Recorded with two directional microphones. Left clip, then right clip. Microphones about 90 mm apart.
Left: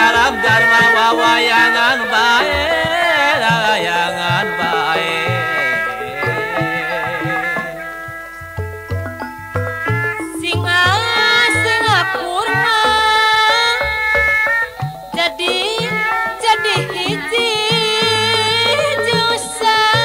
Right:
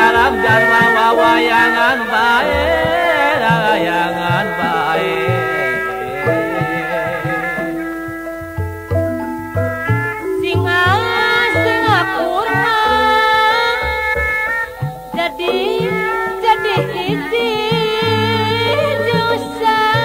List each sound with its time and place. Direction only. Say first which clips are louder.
0.0 s music: right 1 dB; 35° right (ahead or behind)
9.8 s music: even; 35° right (ahead or behind)